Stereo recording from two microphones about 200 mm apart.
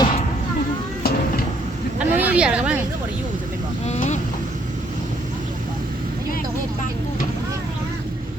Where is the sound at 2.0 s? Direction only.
5° right (ahead or behind).